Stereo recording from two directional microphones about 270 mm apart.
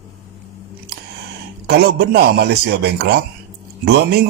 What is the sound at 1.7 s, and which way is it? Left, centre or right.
Speech, right.